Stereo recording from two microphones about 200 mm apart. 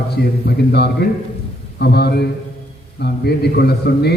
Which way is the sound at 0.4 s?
55° left (ahead or behind).